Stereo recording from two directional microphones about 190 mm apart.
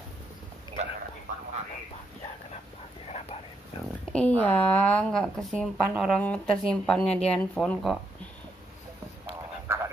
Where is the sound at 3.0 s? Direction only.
35° left (ahead or behind).